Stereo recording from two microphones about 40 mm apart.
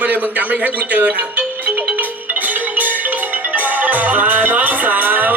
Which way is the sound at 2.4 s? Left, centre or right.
Right.